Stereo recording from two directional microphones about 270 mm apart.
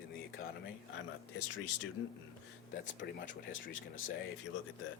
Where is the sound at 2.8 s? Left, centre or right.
Left.